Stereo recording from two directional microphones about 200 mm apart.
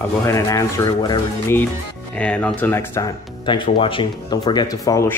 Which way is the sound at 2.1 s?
5° left (ahead or behind).